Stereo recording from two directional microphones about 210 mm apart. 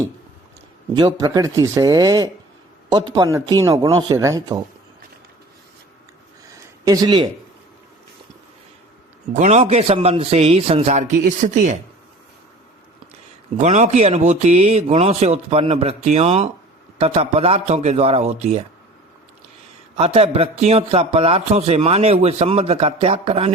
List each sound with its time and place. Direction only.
1.2 s speech: 20° right (ahead or behind)
3.3 s speech: 15° right (ahead or behind)
6.8 s a man's voice: 20° right (ahead or behind)
9.3 s a man's voice: 35° right (ahead or behind)
13.6 s a man's voice: 35° right (ahead or behind)
20.0 s a man's voice: 30° right (ahead or behind)